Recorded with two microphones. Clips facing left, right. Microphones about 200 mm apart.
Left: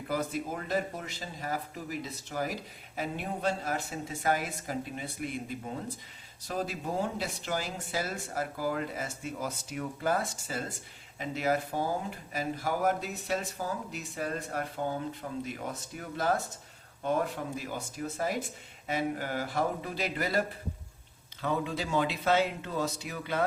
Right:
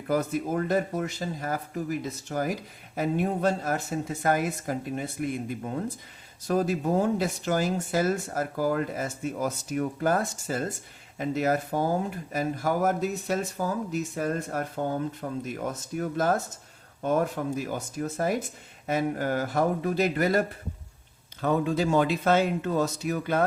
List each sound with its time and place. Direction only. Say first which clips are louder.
0.1 s speech: right 7 dB; 50° right (ahead or behind)
21.4 s speech: right 7 dB; 50° right (ahead or behind)